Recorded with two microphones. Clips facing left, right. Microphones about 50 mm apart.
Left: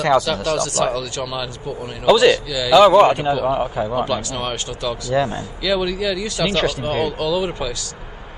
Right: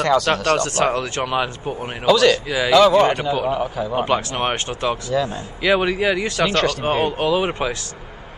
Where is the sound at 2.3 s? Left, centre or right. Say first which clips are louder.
Right 2 dB; right.